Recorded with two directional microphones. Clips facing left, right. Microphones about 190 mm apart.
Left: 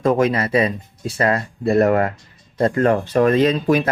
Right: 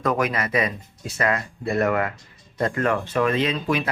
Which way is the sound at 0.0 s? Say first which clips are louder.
Left 6 dB; 25° left (ahead or behind).